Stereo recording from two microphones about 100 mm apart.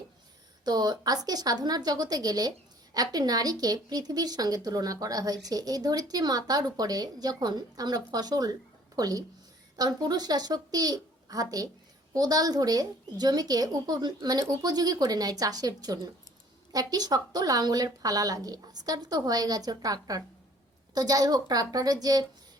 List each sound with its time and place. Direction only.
0.6 s a woman's voice: 40° right (ahead or behind)